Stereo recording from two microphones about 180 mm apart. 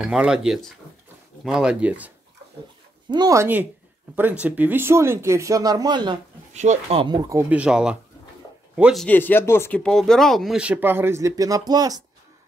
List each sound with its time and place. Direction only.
0.0 s speech: 5° right (ahead or behind)
3.1 s speech: 20° right (ahead or behind)
6.5 s speech: 40° right (ahead or behind); by 9.0 s 5° right (ahead or behind)
9.0 s speech: 10° left (ahead or behind); by 12.0 s 20° right (ahead or behind)